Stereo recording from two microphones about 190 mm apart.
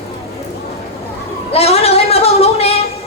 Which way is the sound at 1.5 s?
35° left (ahead or behind).